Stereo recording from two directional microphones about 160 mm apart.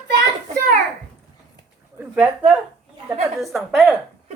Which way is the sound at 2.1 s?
10° right (ahead or behind).